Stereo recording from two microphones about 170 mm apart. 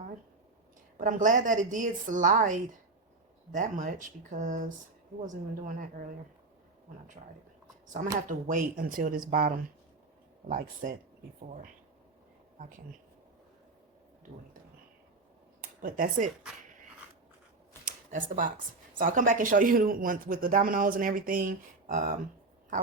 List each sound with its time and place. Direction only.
0.9 s speech: 50° right (ahead or behind)
8.3 s speech: 50° right (ahead or behind)
15.8 s speech: 55° right (ahead or behind)
17.8 s speech: 50° right (ahead or behind)